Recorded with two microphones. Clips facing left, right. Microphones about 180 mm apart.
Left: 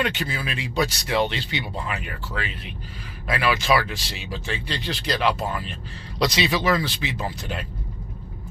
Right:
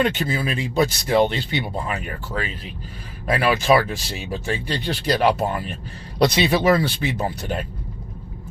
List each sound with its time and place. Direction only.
0.0 s speech: 45° right (ahead or behind)
6.8 s speech: 55° right (ahead or behind)